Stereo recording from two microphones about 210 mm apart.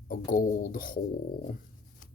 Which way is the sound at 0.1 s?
40° left (ahead or behind).